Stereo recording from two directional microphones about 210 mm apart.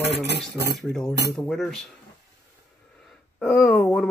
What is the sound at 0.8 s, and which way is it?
Speech, centre (ahead or behind).